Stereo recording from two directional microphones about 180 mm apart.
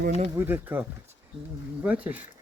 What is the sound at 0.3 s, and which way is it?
Speech, 10° right (ahead or behind).